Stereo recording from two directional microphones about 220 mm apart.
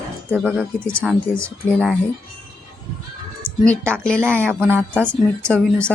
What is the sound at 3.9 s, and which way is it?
A woman's voice, 5° left (ahead or behind).